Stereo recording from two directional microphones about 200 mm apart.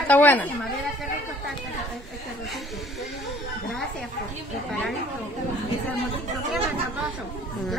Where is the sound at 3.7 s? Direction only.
Centre (ahead or behind).